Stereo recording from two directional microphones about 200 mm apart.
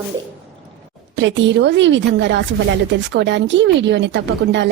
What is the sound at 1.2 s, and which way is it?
Speech, 65° right (ahead or behind).